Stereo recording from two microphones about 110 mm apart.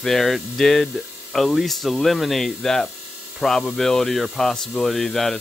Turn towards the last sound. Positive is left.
turn(degrees=0)  # may be behind; listen again after turning